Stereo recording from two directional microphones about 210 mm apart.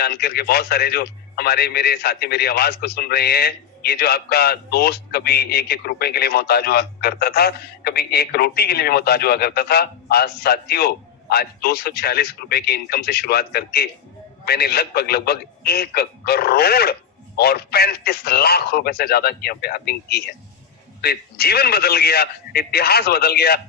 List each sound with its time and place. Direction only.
0.0 s a man's voice: 50° left (ahead or behind)